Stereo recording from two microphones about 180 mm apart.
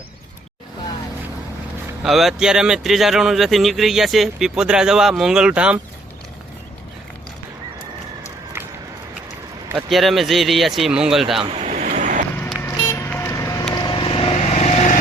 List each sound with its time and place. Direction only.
2.0 s speech: centre (ahead or behind)
9.6 s speech: 5° right (ahead or behind)
11.5 s vehicle: 40° right (ahead or behind)
12.6 s vehicle: 15° left (ahead or behind); by 14.9 s 40° left (ahead or behind)